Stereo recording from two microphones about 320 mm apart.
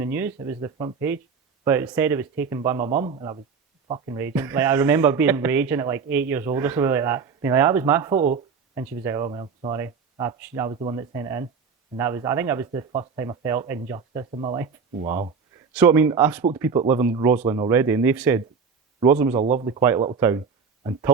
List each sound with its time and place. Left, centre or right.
0.0 s speech: centre
8.1 s speech: right
15.7 s speech: centre
19.4 s speech: centre
19.8 s speech: centre